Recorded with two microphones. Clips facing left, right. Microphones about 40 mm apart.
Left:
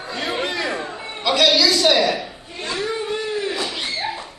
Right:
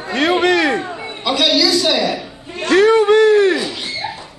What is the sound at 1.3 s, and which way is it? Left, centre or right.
Speech, right.